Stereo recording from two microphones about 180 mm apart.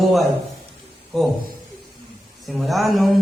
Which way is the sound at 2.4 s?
Centre (ahead or behind).